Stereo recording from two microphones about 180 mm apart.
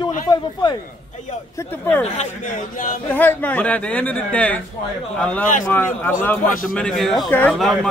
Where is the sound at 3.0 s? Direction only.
10° left (ahead or behind).